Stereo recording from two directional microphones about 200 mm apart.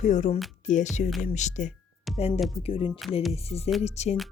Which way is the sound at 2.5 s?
30° left (ahead or behind).